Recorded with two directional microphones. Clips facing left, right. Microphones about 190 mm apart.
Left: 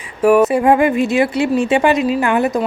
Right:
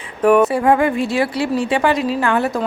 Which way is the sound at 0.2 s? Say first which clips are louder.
Left 1 dB; 10° left (ahead or behind).